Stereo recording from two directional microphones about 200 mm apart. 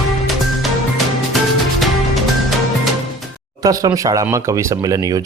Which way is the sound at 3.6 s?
15° right (ahead or behind).